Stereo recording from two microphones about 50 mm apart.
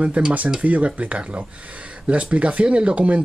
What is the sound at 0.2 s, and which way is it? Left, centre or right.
Speech, right.